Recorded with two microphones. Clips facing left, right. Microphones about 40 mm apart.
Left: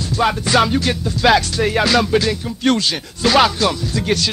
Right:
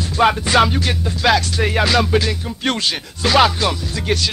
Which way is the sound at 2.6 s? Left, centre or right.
Right.